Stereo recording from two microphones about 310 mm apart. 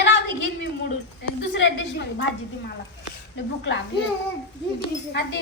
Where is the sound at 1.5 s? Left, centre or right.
Left.